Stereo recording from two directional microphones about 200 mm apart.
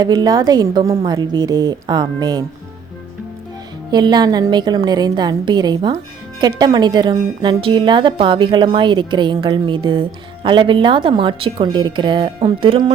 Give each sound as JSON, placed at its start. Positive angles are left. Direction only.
{"t": 0.0, "sound": "speech", "side_deg": -20}
{"t": 3.9, "sound": "speech", "side_deg": -20}